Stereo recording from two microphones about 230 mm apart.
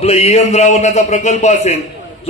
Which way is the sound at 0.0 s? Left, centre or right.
Left.